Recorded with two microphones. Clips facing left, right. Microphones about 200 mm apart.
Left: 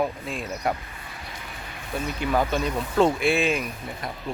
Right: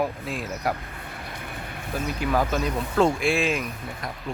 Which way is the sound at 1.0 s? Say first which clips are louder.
Right 3 dB; 55° right (ahead or behind).